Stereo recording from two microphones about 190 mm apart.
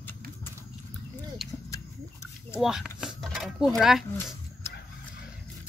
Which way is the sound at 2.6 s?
Centre (ahead or behind).